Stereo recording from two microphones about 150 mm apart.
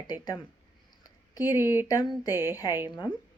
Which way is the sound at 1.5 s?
15° right (ahead or behind).